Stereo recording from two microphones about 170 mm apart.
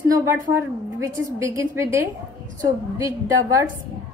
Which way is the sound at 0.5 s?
15° right (ahead or behind).